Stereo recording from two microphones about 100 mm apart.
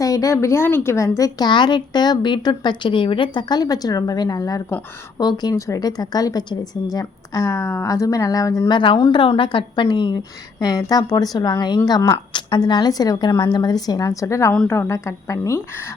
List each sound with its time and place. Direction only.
0.0 s a woman's voice: 35° left (ahead or behind)
1.5 s a woman's voice: 50° left (ahead or behind)
8.7 s a woman's voice: 55° left (ahead or behind); by 15.9 s 25° left (ahead or behind)